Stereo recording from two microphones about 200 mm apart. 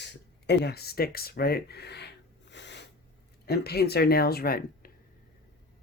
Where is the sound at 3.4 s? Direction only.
50° left (ahead or behind).